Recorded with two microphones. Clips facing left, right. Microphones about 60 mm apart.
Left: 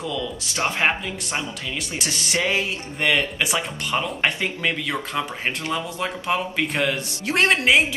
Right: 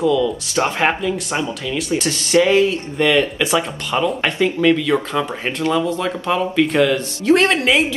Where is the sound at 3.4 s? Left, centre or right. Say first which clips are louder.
Right 6 dB; right.